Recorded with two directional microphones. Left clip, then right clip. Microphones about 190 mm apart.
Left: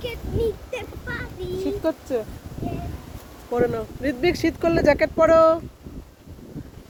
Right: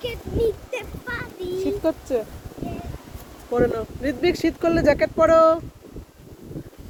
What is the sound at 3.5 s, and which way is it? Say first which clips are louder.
Speech: right 1 dB; 10° left (ahead or behind).